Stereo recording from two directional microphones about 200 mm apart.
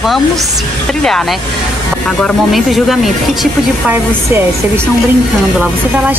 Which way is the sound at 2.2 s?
Centre (ahead or behind).